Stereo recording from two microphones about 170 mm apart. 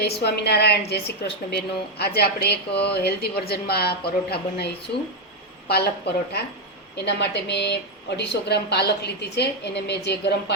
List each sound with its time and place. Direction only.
0.0 s a woman's voice: 75° left (ahead or behind)